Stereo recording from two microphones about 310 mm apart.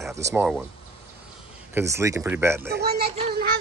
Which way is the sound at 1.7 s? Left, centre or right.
Centre.